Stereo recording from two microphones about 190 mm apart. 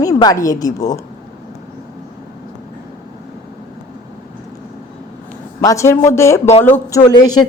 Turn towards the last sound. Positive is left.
turn(degrees=25)  # may be behind; listen again after turning